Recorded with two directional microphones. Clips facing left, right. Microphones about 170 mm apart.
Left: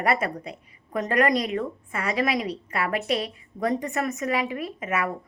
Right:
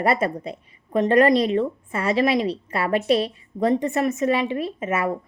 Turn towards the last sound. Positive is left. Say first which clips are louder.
# right 4 dB
turn(degrees=-30)  # may be behind; listen again after turning